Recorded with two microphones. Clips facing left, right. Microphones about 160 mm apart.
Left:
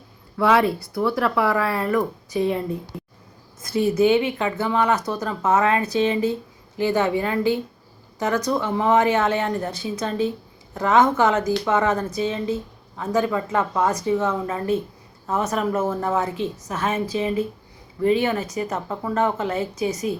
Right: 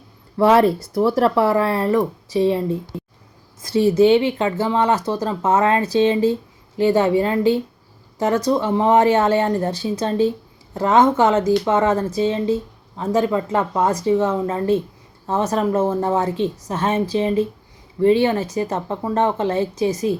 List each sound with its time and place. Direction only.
0.3 s speech: 35° right (ahead or behind)
3.7 s speech: 30° right (ahead or behind)